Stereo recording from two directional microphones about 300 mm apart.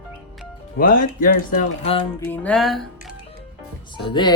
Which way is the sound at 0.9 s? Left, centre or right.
Left.